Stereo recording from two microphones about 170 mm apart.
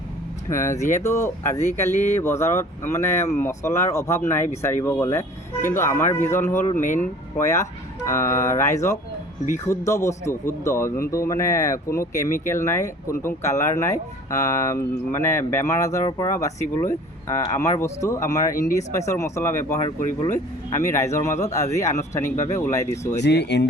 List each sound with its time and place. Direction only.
0.5 s speech: 15° left (ahead or behind)
20.0 s speech: 50° left (ahead or behind)
20.7 s speech: 15° left (ahead or behind)
23.2 s speech: 90° left